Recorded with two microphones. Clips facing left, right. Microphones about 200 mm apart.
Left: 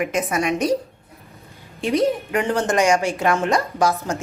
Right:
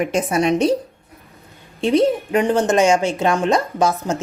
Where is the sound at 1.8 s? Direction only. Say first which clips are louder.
Right 4 dB; 30° right (ahead or behind).